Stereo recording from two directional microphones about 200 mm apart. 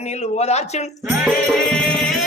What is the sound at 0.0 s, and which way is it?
Speech, 35° left (ahead or behind).